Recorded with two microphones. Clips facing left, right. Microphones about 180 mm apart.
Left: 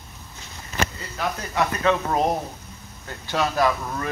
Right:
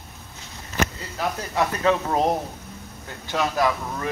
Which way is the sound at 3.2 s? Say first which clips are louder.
Left 1 dB; 15° right (ahead or behind).